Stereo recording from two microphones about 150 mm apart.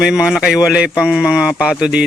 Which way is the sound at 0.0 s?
5° right (ahead or behind).